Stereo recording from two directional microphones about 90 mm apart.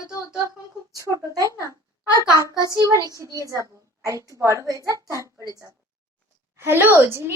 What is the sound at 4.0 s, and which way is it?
A child's voice, 40° right (ahead or behind).